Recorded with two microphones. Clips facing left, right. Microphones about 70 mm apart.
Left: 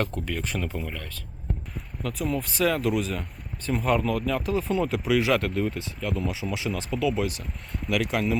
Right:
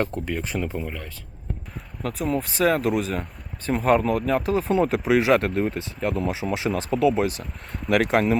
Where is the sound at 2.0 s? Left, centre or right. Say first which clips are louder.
Right 3 dB; right.